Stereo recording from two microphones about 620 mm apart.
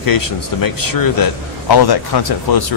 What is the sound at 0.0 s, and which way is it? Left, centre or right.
Speech, left.